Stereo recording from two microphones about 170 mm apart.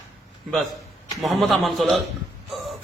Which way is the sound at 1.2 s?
Centre (ahead or behind).